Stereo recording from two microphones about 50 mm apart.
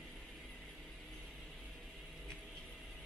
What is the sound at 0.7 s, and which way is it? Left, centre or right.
Mechanisms, centre.